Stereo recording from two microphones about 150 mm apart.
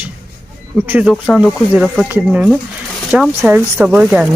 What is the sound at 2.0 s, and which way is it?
Speech, 15° right (ahead or behind).